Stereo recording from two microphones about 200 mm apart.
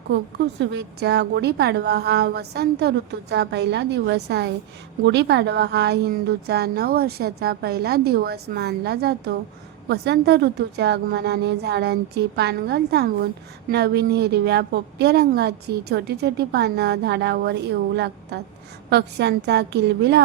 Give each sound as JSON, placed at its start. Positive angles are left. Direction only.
{"t": 0.1, "sound": "a woman's voice", "side_deg": -65}